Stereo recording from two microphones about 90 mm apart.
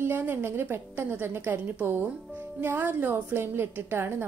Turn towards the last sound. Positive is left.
turn(degrees=-25)  # may be behind; listen again after turning